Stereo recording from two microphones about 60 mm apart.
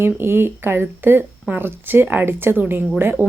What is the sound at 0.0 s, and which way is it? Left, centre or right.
Speech, right.